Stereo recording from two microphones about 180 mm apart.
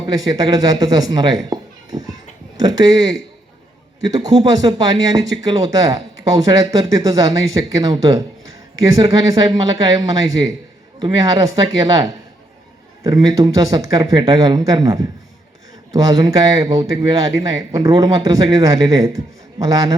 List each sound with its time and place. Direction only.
0.3 s a man's voice: 20° right (ahead or behind)
13.2 s a man's voice: 20° right (ahead or behind)